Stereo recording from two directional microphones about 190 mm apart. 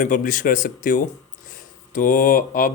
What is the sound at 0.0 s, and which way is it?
Speech, 45° left (ahead or behind).